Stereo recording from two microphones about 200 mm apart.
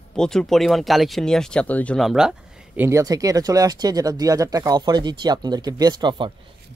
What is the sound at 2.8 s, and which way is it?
Speech, 15° right (ahead or behind).